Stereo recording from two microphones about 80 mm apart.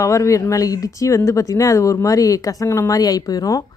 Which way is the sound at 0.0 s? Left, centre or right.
Left.